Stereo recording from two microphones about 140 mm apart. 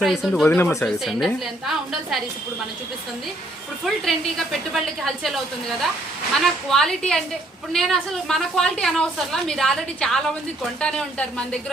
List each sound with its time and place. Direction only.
0.0 s a woman's voice: centre (ahead or behind)
0.4 s speech: 15° left (ahead or behind)
0.9 s a woman's voice: centre (ahead or behind)
3.8 s a woman's voice: centre (ahead or behind)
6.7 s a woman's voice: centre (ahead or behind)